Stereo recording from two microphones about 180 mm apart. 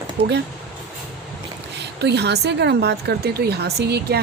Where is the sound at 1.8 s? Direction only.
70° right (ahead or behind).